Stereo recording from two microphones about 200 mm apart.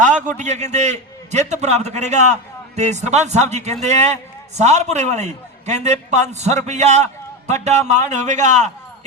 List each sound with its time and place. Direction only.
0.0 s a man's voice: 40° right (ahead or behind)